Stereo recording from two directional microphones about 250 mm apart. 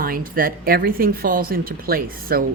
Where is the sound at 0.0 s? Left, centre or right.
Right.